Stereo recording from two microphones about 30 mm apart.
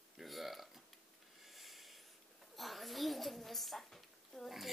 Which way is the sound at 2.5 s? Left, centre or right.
Centre.